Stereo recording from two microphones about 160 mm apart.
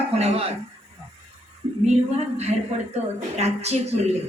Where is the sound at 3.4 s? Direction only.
40° right (ahead or behind).